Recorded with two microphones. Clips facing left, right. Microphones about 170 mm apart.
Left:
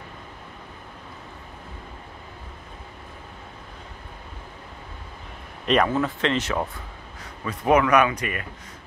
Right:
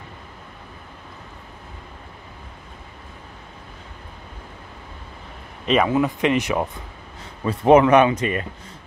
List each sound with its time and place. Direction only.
5.7 s speech: 10° right (ahead or behind)
7.4 s speech: 25° right (ahead or behind)